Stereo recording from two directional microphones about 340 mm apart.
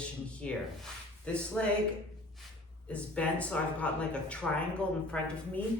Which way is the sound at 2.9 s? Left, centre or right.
Centre.